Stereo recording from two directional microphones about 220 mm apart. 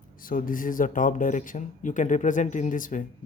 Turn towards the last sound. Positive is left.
turn(degrees=35)  # may be behind; listen again after turning